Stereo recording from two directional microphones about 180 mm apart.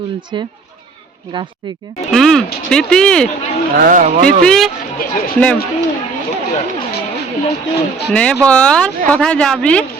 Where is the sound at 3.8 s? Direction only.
45° right (ahead or behind).